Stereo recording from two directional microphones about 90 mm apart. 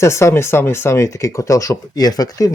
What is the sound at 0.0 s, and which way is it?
Speech, 30° left (ahead or behind).